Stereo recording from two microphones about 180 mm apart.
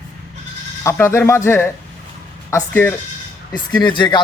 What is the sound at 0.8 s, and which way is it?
Speech, 15° left (ahead or behind).